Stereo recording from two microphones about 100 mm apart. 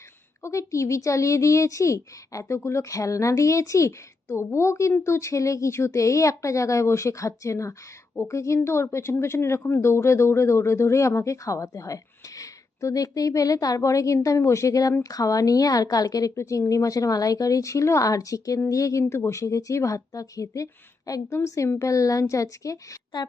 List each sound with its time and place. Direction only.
0.4 s a woman's voice: 30° left (ahead or behind)